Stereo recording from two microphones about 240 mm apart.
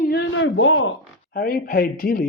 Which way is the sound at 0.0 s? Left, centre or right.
Left.